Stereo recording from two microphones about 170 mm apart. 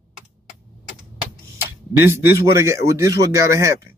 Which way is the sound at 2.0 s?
15° right (ahead or behind).